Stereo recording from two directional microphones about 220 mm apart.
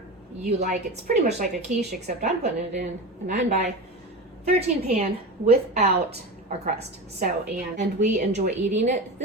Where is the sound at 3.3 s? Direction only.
30° right (ahead or behind).